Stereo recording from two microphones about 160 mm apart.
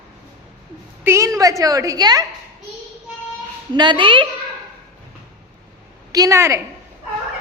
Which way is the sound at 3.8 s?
30° right (ahead or behind).